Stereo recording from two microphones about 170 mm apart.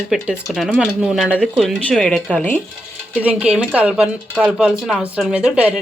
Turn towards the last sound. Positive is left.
turn(degrees=-5)  # may be behind; listen again after turning